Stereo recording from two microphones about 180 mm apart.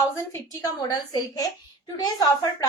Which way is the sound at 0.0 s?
20° left (ahead or behind).